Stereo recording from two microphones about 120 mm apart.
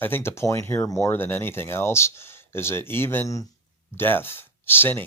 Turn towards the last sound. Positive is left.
turn(degrees=15)  # may be behind; listen again after turning